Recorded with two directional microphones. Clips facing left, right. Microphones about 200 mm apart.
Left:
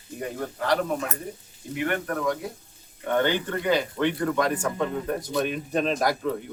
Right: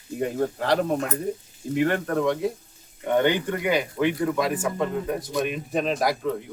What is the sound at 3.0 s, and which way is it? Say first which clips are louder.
Speech: right 2 dB; 15° right (ahead or behind).